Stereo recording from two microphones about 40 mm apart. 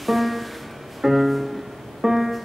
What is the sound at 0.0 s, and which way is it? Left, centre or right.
Music, centre.